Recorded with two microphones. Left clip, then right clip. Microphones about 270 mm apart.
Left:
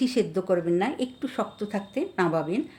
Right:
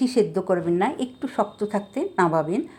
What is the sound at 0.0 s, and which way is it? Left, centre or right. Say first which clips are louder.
A woman's voice: right 4 dB; centre.